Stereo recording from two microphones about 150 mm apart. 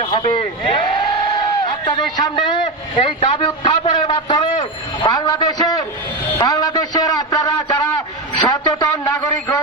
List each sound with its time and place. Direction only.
0.0 s a man's voice: 35° left (ahead or behind); by 9.6 s 20° left (ahead or behind)